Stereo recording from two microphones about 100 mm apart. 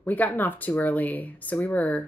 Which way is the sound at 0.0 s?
15° left (ahead or behind).